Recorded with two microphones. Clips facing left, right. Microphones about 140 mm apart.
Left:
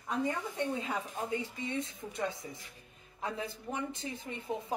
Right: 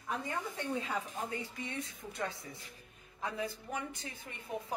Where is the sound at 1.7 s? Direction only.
20° left (ahead or behind).